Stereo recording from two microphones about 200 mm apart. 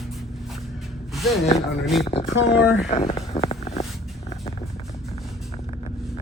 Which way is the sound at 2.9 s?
30° left (ahead or behind).